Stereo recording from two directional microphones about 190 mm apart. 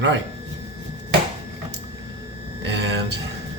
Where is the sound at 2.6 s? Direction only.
65° right (ahead or behind).